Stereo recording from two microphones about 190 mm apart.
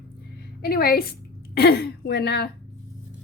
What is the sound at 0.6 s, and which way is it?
A woman's voice, 55° left (ahead or behind).